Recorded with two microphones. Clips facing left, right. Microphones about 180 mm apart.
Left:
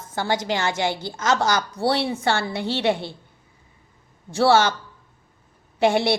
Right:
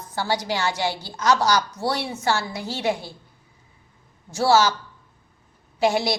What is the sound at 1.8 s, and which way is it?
Speech, 30° left (ahead or behind).